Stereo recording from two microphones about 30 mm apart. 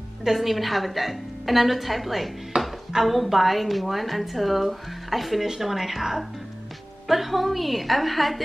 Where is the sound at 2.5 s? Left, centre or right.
Right.